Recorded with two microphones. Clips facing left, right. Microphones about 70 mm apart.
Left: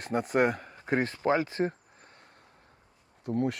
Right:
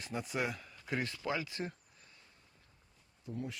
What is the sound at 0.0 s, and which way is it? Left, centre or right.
Speech, left.